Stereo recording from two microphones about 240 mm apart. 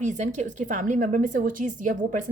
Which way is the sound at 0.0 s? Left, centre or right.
Right.